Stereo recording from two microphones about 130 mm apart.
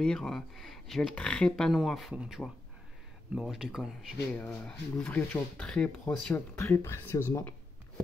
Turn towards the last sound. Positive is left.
turn(degrees=20)  # may be behind; listen again after turning